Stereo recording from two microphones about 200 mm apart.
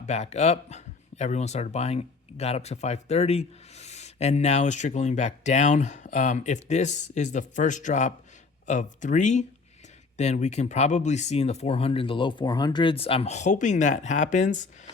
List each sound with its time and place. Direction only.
0.0 s speech: 35° left (ahead or behind)